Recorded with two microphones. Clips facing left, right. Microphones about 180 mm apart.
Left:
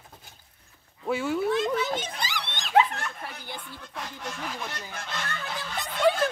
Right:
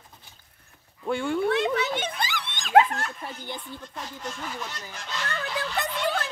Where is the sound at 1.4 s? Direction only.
65° right (ahead or behind).